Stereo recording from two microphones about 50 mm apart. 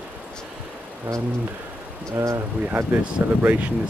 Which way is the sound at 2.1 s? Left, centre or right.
Right.